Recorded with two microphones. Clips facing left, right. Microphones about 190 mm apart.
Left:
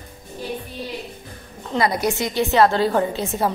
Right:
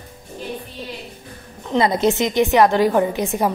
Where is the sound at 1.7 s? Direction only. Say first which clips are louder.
Right 4 dB; 25° right (ahead or behind).